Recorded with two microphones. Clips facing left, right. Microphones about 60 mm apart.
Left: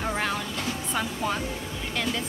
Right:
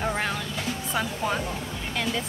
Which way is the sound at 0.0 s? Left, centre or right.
Centre.